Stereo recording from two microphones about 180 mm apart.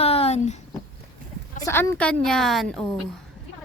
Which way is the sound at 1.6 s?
15° left (ahead or behind).